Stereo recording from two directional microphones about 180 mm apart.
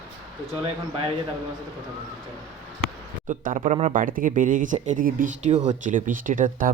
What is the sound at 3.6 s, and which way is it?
Speech, 35° right (ahead or behind).